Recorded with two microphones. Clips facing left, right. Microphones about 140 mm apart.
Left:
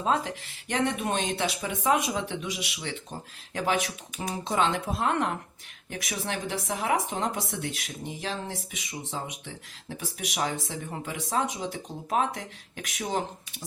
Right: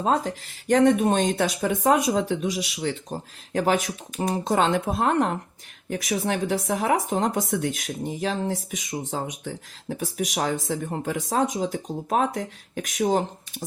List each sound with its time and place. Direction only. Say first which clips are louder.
0.0 s speech: right 4 dB; 40° right (ahead or behind)